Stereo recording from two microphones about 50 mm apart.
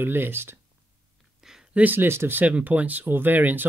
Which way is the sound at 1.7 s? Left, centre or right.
Right.